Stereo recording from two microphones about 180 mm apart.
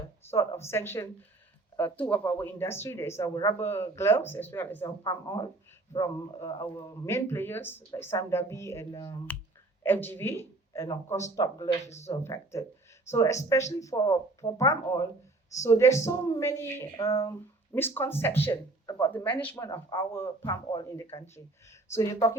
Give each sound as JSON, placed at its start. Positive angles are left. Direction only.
{"t": 0.3, "sound": "speech", "side_deg": 15}
{"t": 11.9, "sound": "speech", "side_deg": 35}
{"t": 12.2, "sound": "speech", "side_deg": 15}
{"t": 20.5, "sound": "speech", "side_deg": 25}